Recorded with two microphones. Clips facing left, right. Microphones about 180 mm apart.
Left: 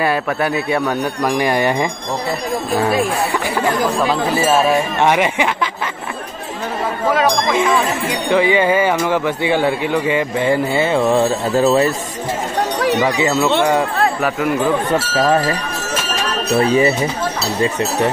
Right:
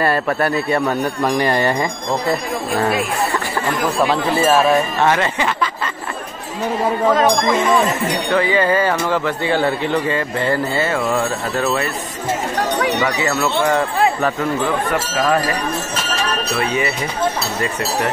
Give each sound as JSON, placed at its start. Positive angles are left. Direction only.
{"t": 0.0, "sound": "a man's voice", "side_deg": 5}
{"t": 5.0, "sound": "speech", "side_deg": 15}
{"t": 7.2, "sound": "speech", "side_deg": 10}
{"t": 13.0, "sound": "speech", "side_deg": 20}
{"t": 16.5, "sound": "speech", "side_deg": 35}